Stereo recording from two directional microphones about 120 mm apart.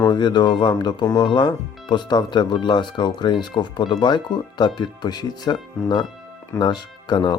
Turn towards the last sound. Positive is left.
turn(degrees=35)  # may be behind; listen again after turning